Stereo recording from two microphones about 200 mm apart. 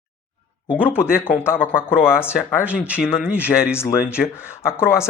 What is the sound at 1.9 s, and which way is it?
Speech, 5° right (ahead or behind).